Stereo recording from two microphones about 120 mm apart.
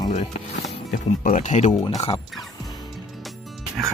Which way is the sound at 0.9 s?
90° left.